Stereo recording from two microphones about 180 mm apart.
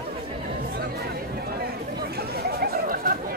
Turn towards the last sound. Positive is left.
turn(degrees=-55)  # may be behind; listen again after turning